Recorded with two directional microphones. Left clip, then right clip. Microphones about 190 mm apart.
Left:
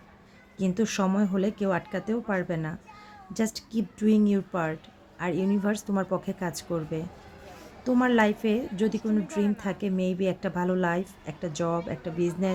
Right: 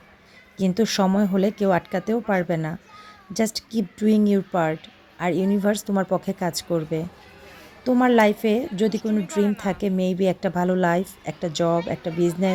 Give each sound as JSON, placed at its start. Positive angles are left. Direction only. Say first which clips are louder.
{"t": 0.5, "sound": "a woman's voice", "louder": "right 6 dB", "side_deg": -25}
{"t": 9.4, "sound": "speech", "louder": "right 9 dB", "side_deg": 5}
{"t": 9.6, "sound": "a woman's voice", "louder": "right 6 dB", "side_deg": -25}